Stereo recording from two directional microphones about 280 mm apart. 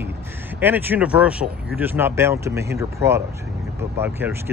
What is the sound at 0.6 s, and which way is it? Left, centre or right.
Speech, centre.